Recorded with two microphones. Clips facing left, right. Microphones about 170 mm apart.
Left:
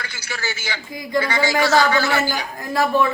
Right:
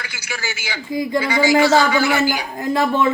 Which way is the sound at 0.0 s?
10° right (ahead or behind).